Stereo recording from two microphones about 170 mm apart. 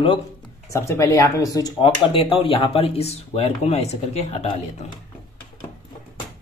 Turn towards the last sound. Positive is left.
turn(degrees=40)  # may be behind; listen again after turning